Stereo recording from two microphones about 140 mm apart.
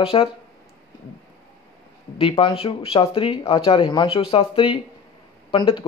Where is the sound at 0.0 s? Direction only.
40° left (ahead or behind).